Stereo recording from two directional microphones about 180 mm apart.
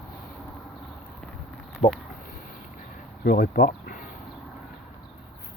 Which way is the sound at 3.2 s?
55° left (ahead or behind).